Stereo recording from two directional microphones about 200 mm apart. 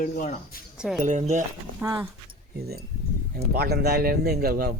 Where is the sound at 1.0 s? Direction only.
40° right (ahead or behind).